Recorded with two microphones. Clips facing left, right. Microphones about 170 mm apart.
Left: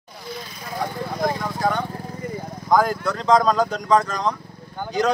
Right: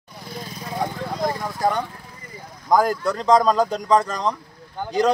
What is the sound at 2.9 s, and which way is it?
Speech, 35° right (ahead or behind).